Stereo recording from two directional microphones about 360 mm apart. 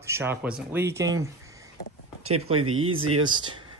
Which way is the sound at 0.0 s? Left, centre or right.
Centre.